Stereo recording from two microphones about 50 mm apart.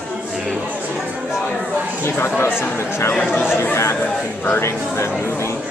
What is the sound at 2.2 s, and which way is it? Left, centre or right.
Speech, left.